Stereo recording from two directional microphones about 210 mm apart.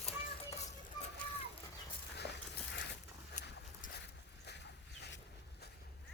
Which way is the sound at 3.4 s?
50° left (ahead or behind).